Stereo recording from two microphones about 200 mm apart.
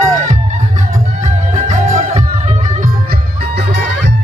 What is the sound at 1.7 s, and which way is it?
Music, 35° right (ahead or behind).